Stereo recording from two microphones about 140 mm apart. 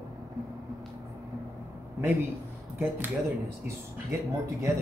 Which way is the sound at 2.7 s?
15° right (ahead or behind).